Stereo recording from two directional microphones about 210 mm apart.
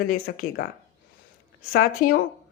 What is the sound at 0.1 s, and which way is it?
Speech, 40° left (ahead or behind).